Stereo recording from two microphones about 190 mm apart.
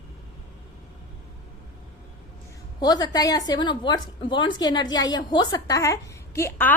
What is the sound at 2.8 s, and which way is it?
A woman's voice, 20° left (ahead or behind).